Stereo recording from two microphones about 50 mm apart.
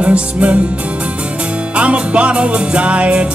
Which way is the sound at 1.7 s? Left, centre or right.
Right.